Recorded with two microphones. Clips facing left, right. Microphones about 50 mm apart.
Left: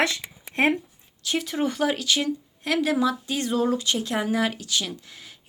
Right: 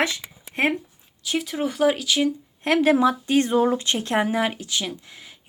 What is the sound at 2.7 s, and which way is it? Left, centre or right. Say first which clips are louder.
Speech: right 5 dB; right.